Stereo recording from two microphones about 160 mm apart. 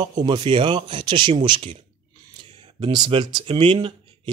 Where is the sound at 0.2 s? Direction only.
30° right (ahead or behind).